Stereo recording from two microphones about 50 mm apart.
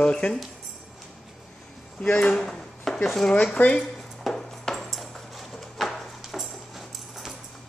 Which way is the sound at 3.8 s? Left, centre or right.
Centre.